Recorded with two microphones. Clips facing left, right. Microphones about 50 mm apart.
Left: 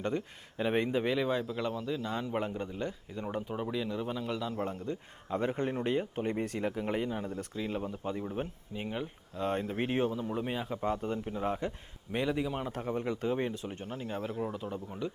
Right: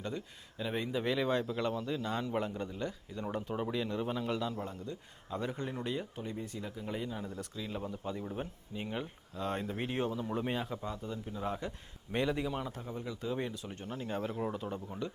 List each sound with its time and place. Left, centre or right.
0.0 s speech: left
1.0 s speech: centre
2.2 s speech: centre
4.5 s speech: left
6.2 s speech: left
7.1 s speech: left
10.1 s speech: centre
10.8 s speech: left
11.3 s speech: left
12.1 s speech: centre
12.7 s speech: left
13.3 s speech: left
13.7 s speech: centre